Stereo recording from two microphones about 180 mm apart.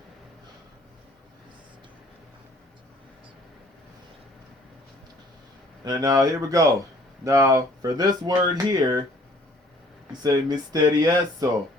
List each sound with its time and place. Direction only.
5.8 s speech: 20° right (ahead or behind)
10.1 s speech: 20° right (ahead or behind)